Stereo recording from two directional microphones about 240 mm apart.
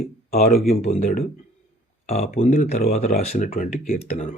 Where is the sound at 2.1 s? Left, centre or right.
Left.